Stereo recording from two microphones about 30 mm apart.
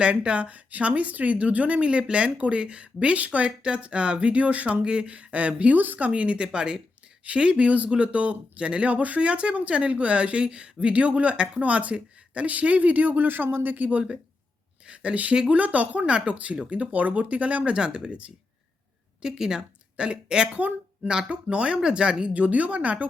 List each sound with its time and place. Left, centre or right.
0.0 s speech: right
3.6 s speech: right
5.7 s speech: right
6.1 s speech: right
7.6 s speech: right
12.5 s speech: right
14.8 s speech: right
15.5 s speech: right
16.0 s speech: right
16.9 s speech: right
17.7 s speech: right
19.2 s speech: right
20.0 s speech: right
22.3 s speech: right